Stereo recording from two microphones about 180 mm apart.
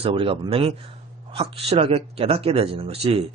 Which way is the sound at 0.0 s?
30° right (ahead or behind).